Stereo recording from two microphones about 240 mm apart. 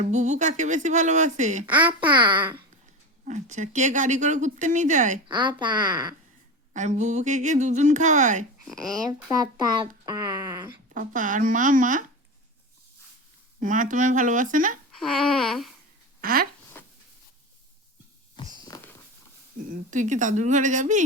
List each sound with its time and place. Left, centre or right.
0.0 s a woman's voice: right
1.6 s speech: centre
3.2 s speech: right
5.3 s a woman's voice: centre
6.7 s a woman's voice: right
8.7 s speech: centre
10.9 s speech: right
13.6 s speech: right
14.9 s a sound: centre
16.2 s speech: right
18.6 s a sound: centre
19.7 s speech: right